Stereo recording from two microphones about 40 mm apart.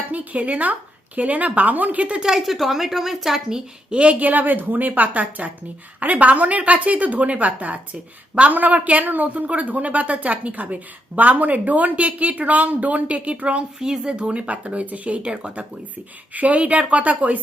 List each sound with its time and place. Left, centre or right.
0.1 s speech: right
2.4 s a woman's voice: centre; by 4.2 s right
4.2 s a woman's voice: right
13.7 s speech: centre
16.3 s speech: right